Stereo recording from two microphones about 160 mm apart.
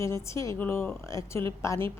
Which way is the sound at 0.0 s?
20° left (ahead or behind).